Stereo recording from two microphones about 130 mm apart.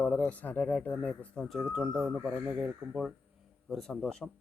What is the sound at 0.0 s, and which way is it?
Speech, 10° left (ahead or behind).